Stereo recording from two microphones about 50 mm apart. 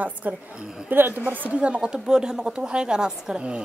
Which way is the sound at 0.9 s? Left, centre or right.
Right.